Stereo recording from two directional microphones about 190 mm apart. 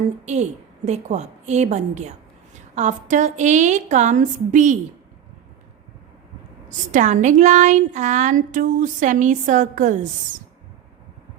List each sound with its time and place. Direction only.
0.9 s speech: 35° right (ahead or behind)
6.9 s speech: 40° right (ahead or behind)